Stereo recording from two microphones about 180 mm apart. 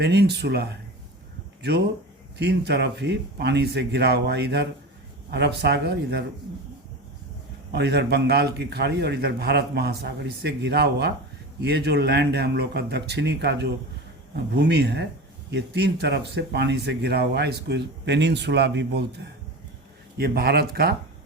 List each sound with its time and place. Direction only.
0.0 s a man's voice: 65° right (ahead or behind)
2.4 s speech: 70° right (ahead or behind)
7.7 s a man's voice: 65° right (ahead or behind)
20.1 s a man's voice: 60° right (ahead or behind)